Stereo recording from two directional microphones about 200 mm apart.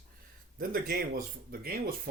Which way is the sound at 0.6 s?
50° right (ahead or behind).